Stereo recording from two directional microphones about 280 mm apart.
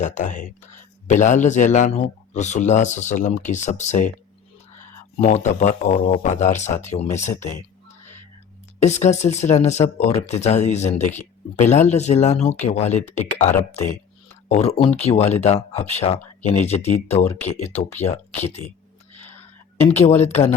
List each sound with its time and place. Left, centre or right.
0.0 s speech: left
5.2 s speech: left
8.8 s speech: left
17.7 s speech: centre
18.0 s speech: left
19.9 s speech: left